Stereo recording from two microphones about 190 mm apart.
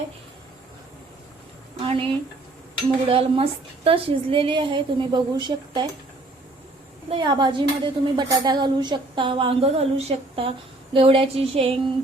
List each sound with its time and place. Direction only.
1.8 s a woman's voice: 30° right (ahead or behind)
7.1 s a woman's voice: 25° right (ahead or behind)